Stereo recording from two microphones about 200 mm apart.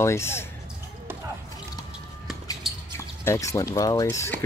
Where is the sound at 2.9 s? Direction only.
15° left (ahead or behind).